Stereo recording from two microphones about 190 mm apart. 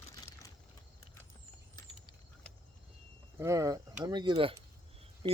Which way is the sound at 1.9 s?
30° left (ahead or behind).